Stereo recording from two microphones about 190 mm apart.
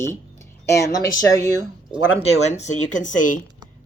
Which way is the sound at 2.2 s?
35° left (ahead or behind).